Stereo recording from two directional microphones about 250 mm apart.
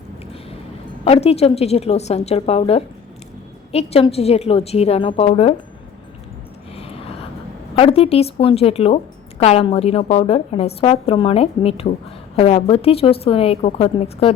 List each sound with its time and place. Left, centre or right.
1.0 s a woman's voice: left
7.8 s a woman's voice: left